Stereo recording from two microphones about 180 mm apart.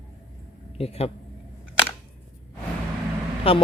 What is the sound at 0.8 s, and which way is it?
Speech, 35° left (ahead or behind).